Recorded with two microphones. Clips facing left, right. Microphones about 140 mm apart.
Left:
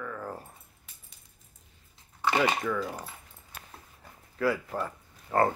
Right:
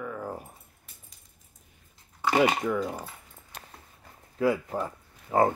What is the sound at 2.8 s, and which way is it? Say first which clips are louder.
Speech: right 3 dB; centre (ahead or behind).